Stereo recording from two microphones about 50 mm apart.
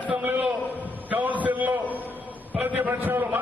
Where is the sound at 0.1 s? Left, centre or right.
Right.